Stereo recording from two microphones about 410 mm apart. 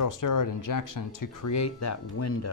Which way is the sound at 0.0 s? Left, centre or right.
Left.